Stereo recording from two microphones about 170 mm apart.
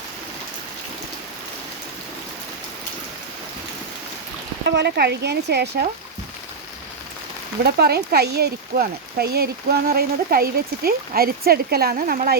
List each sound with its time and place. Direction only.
4.6 s speech: 85° right
7.6 s speech: 70° right (ahead or behind)